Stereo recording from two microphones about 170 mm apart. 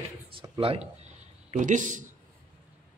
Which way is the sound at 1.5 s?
50° right (ahead or behind).